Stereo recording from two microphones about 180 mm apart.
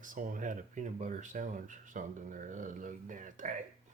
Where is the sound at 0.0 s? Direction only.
45° right (ahead or behind).